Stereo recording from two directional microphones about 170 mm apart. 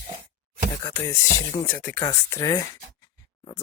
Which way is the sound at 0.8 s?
15° left (ahead or behind).